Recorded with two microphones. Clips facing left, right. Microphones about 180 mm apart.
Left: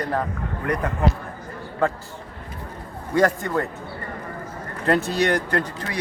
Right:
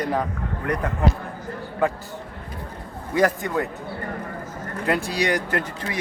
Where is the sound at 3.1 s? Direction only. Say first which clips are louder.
Left 1 dB; 20° right (ahead or behind).